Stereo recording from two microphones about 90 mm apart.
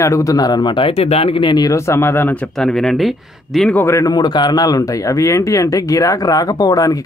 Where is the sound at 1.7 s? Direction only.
30° left (ahead or behind).